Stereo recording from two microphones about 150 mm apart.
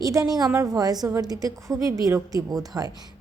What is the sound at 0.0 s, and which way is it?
A woman's voice, 25° right (ahead or behind).